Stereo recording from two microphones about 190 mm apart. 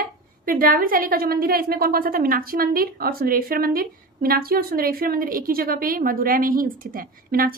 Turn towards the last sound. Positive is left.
turn(degrees=-50)  # may be behind; listen again after turning